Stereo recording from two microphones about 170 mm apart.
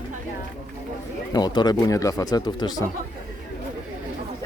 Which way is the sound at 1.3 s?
25° left (ahead or behind).